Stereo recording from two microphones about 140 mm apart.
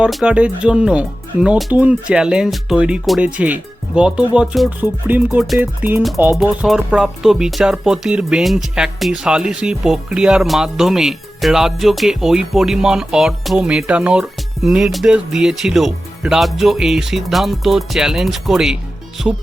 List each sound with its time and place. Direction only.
0.0 s speech: 5° right (ahead or behind)
6.3 s speech: centre (ahead or behind)